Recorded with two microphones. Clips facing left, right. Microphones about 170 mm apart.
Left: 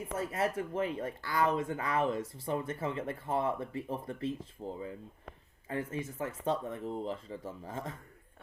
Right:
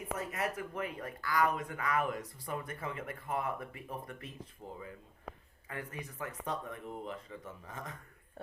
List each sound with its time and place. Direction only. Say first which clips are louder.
0.2 s speech: left 7 dB; 30° left (ahead or behind)